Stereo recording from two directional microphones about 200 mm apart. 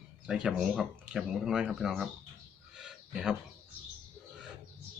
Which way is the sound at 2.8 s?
5° right (ahead or behind).